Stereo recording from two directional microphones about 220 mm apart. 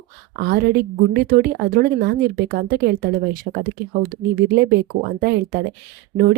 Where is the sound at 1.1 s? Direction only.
45° right (ahead or behind).